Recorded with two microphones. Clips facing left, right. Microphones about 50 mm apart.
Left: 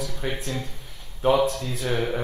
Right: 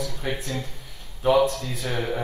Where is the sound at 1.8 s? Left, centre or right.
Centre.